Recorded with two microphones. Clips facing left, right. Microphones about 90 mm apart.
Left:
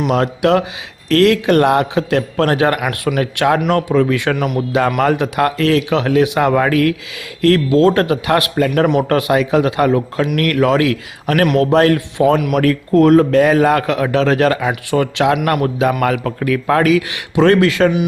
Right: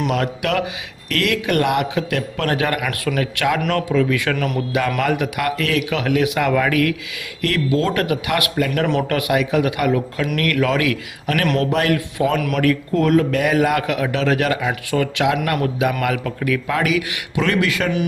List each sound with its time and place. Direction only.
0.1 s speech: 30° left (ahead or behind)
4.9 s speech: 40° left (ahead or behind)
10.3 s speech: 45° left (ahead or behind)
10.6 s speech: 30° left (ahead or behind)
14.8 s speech: 30° left (ahead or behind)